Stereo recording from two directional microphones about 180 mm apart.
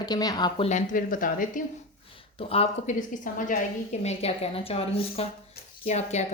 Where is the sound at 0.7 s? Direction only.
45° left (ahead or behind).